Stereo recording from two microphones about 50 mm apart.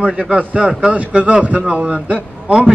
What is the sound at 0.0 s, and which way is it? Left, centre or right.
A man's voice, right.